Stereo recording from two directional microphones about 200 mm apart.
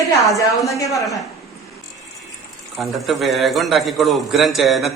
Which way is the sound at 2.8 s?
Centre (ahead or behind).